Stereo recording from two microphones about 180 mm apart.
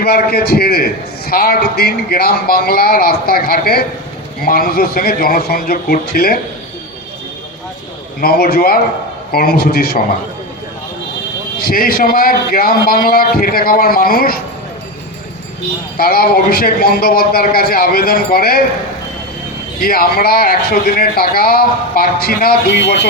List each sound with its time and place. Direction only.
0.0 s a man's voice: 60° left (ahead or behind)
8.2 s a man's voice: 60° left (ahead or behind)
11.6 s a man's voice: 55° left (ahead or behind)
16.0 s a man's voice: 55° left (ahead or behind)
19.8 s a man's voice: 55° left (ahead or behind)